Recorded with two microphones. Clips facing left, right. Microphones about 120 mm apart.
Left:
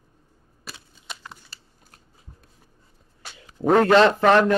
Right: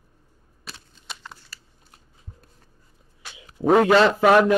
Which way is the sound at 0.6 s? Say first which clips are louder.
Left 1 dB; 5° left (ahead or behind).